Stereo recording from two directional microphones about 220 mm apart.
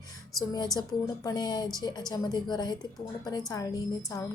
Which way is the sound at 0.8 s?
15° left (ahead or behind).